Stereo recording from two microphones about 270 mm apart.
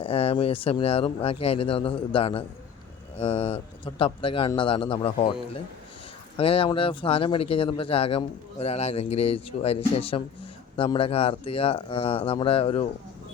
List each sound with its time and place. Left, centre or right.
0.0 s speech: left